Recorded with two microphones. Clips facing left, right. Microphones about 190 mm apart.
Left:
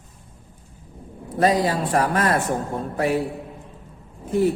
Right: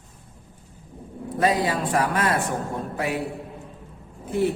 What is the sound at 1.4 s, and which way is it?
Speech, 35° left (ahead or behind).